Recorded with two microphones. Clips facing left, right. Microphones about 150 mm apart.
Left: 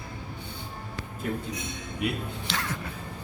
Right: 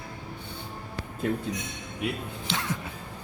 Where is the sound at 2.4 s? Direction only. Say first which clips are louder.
Right 3 dB; 20° right (ahead or behind).